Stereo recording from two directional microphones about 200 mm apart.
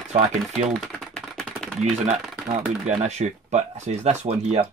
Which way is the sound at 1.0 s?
Centre (ahead or behind).